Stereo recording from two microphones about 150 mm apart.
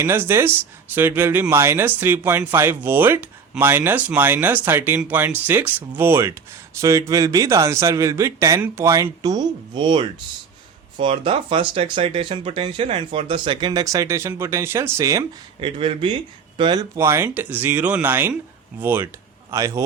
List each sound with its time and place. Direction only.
0.0 s speech: 15° right (ahead or behind)
15.6 s speech: 35° right (ahead or behind); by 19.8 s 20° right (ahead or behind)